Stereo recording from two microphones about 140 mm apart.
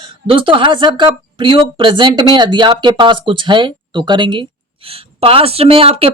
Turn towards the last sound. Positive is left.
turn(degrees=-45)  # may be behind; listen again after turning